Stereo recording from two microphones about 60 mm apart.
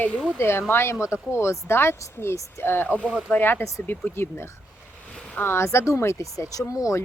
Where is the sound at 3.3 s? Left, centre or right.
Left.